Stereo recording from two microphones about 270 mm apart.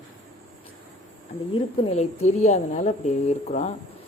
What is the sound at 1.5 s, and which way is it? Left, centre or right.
A woman's voice, left.